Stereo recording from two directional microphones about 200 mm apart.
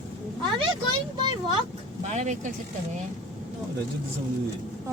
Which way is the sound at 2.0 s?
35° right (ahead or behind).